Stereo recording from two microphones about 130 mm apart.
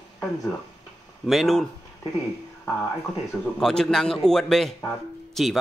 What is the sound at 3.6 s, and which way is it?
A man's voice, 5° left (ahead or behind).